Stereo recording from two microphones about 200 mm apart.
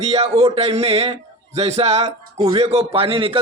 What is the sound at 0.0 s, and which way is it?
Speech, 30° right (ahead or behind).